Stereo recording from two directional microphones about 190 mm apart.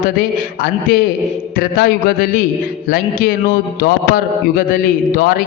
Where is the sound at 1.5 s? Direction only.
50° left (ahead or behind).